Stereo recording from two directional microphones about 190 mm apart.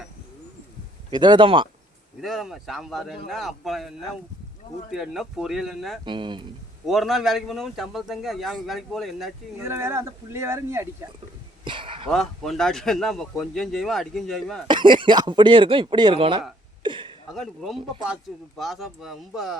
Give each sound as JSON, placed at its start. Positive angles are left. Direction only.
{"t": 1.1, "sound": "speech", "side_deg": -25}
{"t": 2.2, "sound": "a man's voice", "side_deg": 0}
{"t": 6.1, "sound": "speech", "side_deg": -25}
{"t": 6.8, "sound": "a man's voice", "side_deg": 0}
{"t": 9.6, "sound": "speech", "side_deg": -15}
{"t": 11.6, "sound": "a sound", "side_deg": -25}
{"t": 12.1, "sound": "a man's voice", "side_deg": 0}
{"t": 14.7, "sound": "speech", "side_deg": -25}
{"t": 16.8, "sound": "a sound", "side_deg": -25}
{"t": 17.2, "sound": "a man's voice", "side_deg": 0}